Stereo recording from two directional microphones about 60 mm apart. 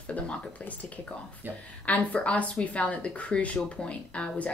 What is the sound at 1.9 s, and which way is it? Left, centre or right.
Speech, left.